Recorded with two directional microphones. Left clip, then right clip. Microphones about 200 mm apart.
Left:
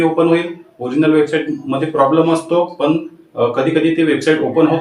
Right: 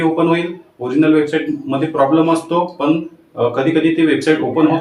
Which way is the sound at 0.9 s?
Centre (ahead or behind).